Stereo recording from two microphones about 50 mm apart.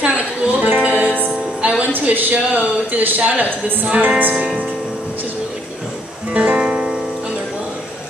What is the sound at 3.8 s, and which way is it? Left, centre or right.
Music, right.